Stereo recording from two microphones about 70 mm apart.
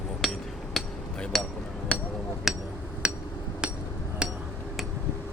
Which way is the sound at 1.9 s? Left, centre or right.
Centre.